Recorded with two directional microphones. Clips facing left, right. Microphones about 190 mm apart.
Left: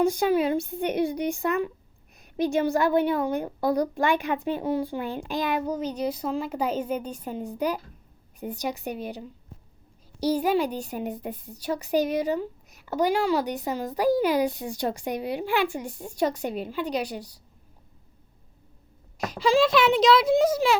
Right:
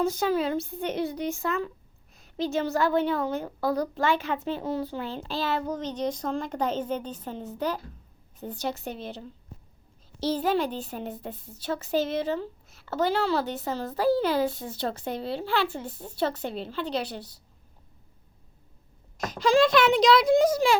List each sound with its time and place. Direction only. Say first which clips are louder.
0.0 s a woman's voice: left 3 dB; 15° left (ahead or behind)
19.2 s speech: even; 5° left (ahead or behind)